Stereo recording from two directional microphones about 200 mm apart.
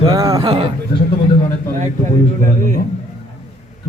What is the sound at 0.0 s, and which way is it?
Speech, 15° right (ahead or behind).